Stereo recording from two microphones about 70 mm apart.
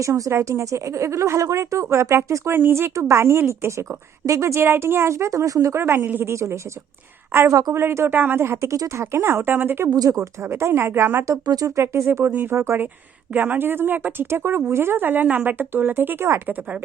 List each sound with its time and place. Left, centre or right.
0.0 s speech: right
5.8 s speech: right
6.3 s speech: right
7.3 s speech: right
8.6 s speech: right
11.4 s speech: right
11.8 s speech: right